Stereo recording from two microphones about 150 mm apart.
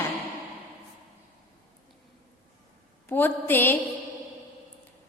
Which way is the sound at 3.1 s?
15° left (ahead or behind).